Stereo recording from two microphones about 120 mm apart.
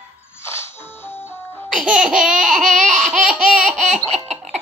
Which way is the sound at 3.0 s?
5° right (ahead or behind).